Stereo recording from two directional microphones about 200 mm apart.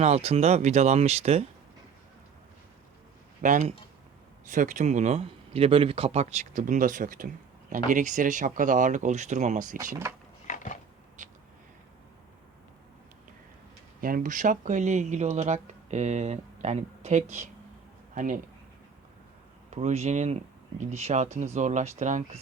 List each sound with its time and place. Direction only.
0.0 s speech: 30° right (ahead or behind)
3.4 s speech: 40° right (ahead or behind)
10.4 s a sound: 40° left (ahead or behind)
11.2 s a sound: 35° right (ahead or behind)
14.0 s speech: 45° right (ahead or behind)
19.7 s speech: 35° right (ahead or behind)